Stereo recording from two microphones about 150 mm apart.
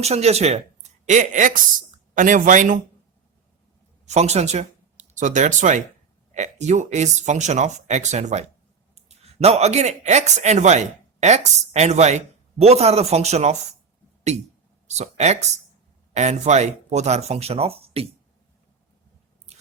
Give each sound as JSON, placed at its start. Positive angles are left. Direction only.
{"t": 0.0, "sound": "a woman's voice", "side_deg": -45}
{"t": 4.0, "sound": "speech", "side_deg": -50}
{"t": 14.8, "sound": "speech", "side_deg": -50}